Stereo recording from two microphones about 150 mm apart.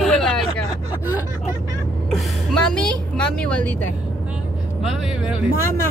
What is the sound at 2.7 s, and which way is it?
A woman's voice, 5° left (ahead or behind).